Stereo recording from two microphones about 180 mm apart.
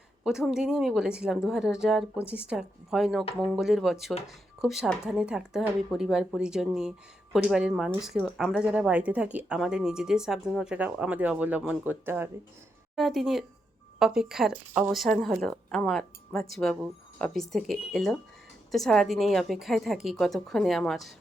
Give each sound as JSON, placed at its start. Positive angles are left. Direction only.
{"t": 0.3, "sound": "speech", "side_deg": -5}
{"t": 13.0, "sound": "speech", "side_deg": 0}